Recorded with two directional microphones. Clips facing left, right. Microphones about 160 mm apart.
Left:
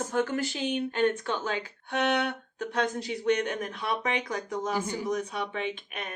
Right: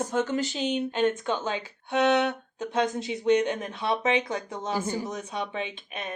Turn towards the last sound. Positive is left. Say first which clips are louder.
# left 1 dB
turn(degrees=-25)  # may be behind; listen again after turning